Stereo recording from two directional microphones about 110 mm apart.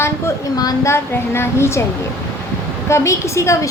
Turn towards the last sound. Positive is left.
turn(degrees=25)  # may be behind; listen again after turning